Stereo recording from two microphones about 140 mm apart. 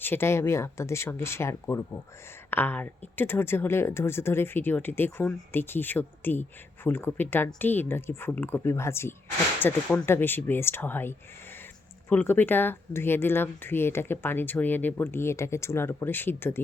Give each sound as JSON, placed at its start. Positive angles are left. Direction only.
{"t": 0.0, "sound": "speech", "side_deg": 15}